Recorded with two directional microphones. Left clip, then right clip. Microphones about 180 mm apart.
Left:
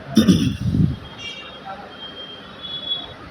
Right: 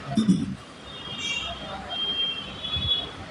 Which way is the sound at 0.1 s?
35° left (ahead or behind).